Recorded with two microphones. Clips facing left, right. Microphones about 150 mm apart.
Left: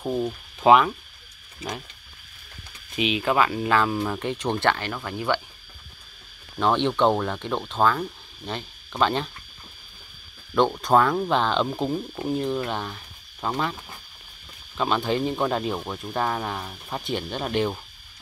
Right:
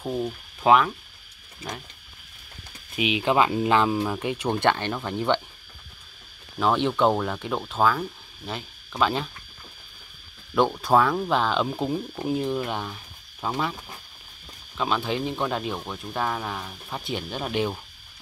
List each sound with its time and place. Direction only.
0.0 s speech: 10° left (ahead or behind)
3.0 s speech: 10° right (ahead or behind)
6.6 s speech: 5° right (ahead or behind)
10.5 s speech: 5° right (ahead or behind)
14.8 s speech: centre (ahead or behind)